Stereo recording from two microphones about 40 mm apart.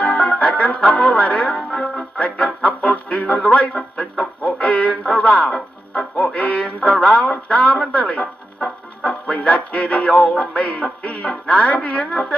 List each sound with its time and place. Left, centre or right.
0.0 s music: left
4.4 s speech: left
6.1 s music: left
9.0 s music: left